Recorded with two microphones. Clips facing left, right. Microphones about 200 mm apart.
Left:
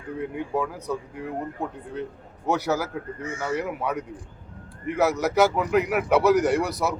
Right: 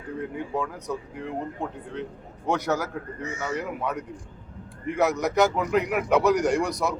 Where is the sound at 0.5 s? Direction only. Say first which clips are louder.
Left 3 dB; 5° left (ahead or behind).